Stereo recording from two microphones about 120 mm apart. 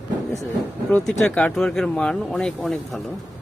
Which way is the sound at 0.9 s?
5° left (ahead or behind).